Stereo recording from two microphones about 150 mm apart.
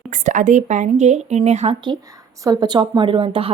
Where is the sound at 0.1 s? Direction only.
55° right (ahead or behind).